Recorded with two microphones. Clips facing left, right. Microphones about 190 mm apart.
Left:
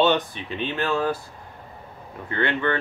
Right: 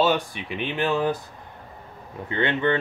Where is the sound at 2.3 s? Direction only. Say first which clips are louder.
Right 1 dB; 20° right (ahead or behind).